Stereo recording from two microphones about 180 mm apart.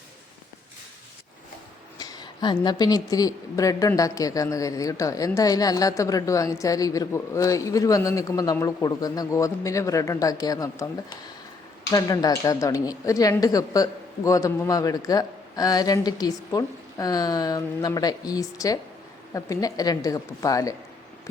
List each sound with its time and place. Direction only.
2.0 s a woman's voice: 20° left (ahead or behind)